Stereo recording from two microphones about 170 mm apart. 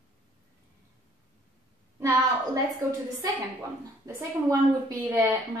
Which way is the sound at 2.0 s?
25° right (ahead or behind).